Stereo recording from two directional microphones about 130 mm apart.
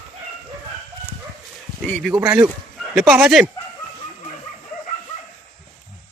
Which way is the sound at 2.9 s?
5° right (ahead or behind).